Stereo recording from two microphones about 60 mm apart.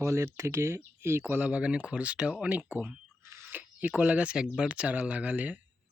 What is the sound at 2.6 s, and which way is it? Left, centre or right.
Speech, right.